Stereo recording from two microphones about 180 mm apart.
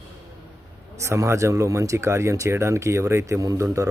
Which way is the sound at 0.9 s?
15° right (ahead or behind).